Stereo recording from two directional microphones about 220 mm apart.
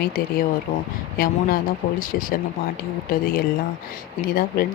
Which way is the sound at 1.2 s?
40° left (ahead or behind).